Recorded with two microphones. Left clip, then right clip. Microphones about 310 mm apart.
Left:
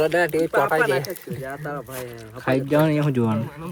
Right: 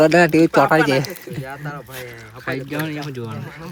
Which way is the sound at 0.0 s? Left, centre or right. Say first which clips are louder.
Right 7 dB; right.